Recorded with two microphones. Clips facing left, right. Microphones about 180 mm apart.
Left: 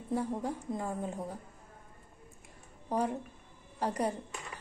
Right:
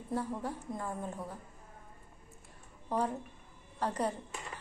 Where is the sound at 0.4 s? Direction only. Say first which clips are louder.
Left 3 dB; 15° left (ahead or behind).